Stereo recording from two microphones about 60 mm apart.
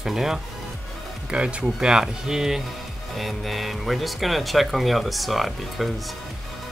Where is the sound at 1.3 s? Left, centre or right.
Centre.